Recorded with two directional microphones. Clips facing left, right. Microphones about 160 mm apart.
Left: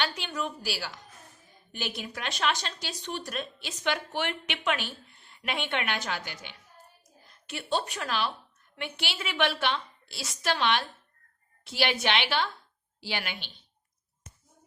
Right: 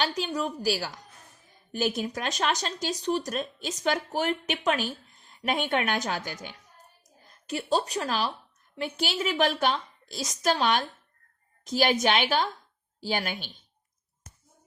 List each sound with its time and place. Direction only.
0.0 s speech: 35° right (ahead or behind)